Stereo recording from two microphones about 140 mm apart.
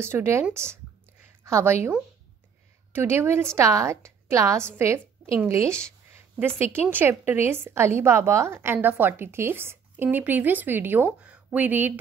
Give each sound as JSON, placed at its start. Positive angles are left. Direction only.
{"t": 0.0, "sound": "a woman's voice", "side_deg": -20}
{"t": 2.9, "sound": "a woman's voice", "side_deg": -15}